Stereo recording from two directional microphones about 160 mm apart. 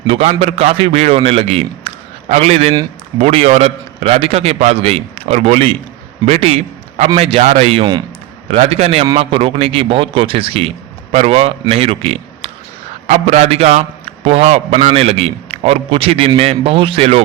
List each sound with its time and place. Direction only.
0.1 s a man's voice: 40° right (ahead or behind)